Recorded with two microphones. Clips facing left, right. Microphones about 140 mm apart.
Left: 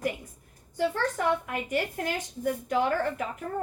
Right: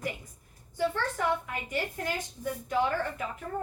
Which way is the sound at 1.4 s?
50° left (ahead or behind).